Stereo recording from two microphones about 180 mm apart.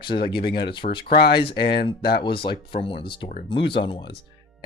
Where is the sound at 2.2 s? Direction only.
30° left (ahead or behind).